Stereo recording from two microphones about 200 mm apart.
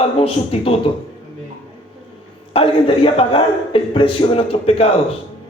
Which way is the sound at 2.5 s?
25° left (ahead or behind).